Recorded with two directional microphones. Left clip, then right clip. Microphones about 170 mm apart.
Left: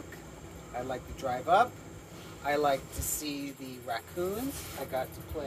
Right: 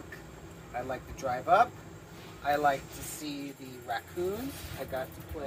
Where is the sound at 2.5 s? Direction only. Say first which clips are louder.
Right 1 dB; 50° left (ahead or behind).